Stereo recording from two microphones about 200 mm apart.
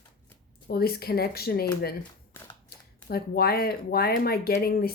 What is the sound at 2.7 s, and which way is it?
A woman's voice, 50° left (ahead or behind).